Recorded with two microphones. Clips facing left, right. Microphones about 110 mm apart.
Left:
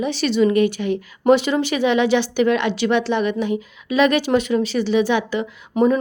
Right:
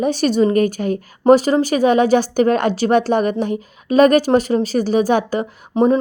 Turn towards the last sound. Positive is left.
turn(degrees=-30)  # may be behind; listen again after turning